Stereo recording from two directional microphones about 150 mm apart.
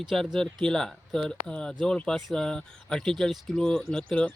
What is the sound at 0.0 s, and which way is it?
Speech, centre (ahead or behind).